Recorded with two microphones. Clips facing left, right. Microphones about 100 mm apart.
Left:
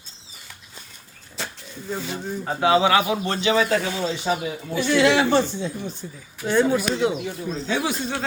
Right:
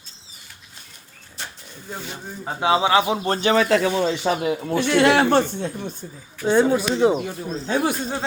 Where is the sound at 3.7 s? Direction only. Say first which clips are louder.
Right 4 dB; 80° right; by 6.0 s 55° right (ahead or behind).